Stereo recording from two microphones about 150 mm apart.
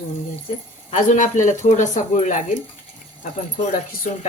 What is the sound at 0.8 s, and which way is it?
Speech, 55° left (ahead or behind).